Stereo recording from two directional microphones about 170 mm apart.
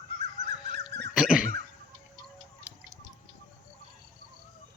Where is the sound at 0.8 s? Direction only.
80° right.